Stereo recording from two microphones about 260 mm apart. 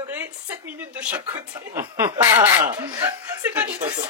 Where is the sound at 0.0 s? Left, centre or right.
Centre.